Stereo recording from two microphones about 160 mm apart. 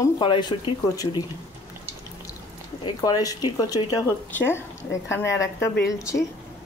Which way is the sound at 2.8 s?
25° left (ahead or behind).